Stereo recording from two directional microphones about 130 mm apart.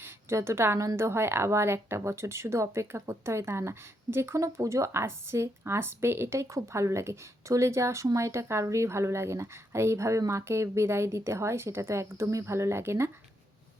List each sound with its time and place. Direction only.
0.0 s speech: 20° right (ahead or behind)